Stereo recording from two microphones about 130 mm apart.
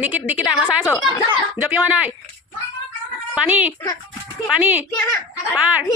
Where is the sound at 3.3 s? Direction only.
10° right (ahead or behind).